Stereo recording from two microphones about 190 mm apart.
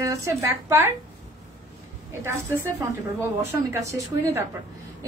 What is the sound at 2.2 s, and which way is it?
A woman's voice, 15° right (ahead or behind).